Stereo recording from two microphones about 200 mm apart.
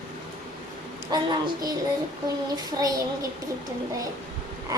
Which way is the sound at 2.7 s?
20° right (ahead or behind).